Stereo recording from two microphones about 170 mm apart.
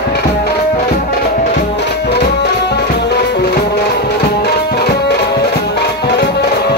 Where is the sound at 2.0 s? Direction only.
75° left (ahead or behind).